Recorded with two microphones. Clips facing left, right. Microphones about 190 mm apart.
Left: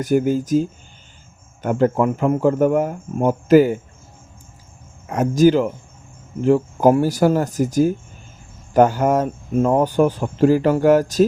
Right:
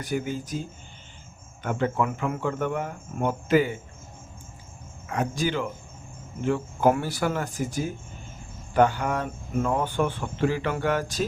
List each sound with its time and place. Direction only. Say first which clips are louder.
0.0 s speech: left 11 dB; 45° left (ahead or behind)
1.6 s speech: left 8 dB; 45° left (ahead or behind)
5.1 s speech: left 12 dB; 45° left (ahead or behind)